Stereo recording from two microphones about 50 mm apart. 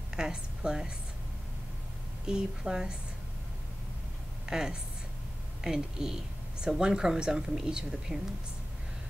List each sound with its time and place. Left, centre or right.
0.1 s a woman's voice: centre
2.2 s a woman's voice: centre
4.5 s a woman's voice: centre